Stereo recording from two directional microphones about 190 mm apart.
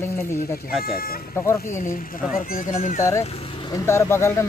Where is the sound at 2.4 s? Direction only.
45° left (ahead or behind).